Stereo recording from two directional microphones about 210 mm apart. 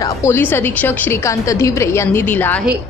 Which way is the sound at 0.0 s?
10° left (ahead or behind).